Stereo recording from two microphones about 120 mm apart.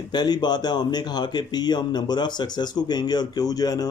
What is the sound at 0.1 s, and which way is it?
Speech, 35° left (ahead or behind).